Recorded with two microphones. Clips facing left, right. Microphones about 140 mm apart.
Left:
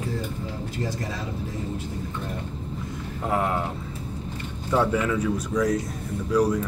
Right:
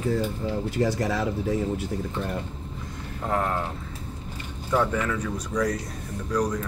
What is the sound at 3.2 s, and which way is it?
Speech, 10° left (ahead or behind).